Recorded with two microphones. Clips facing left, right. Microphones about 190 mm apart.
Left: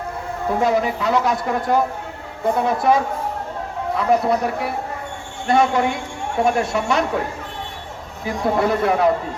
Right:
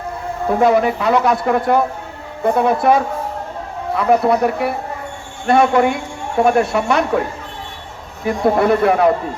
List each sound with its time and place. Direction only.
0.6 s speech: 60° right (ahead or behind)
8.2 s speech: 60° right (ahead or behind)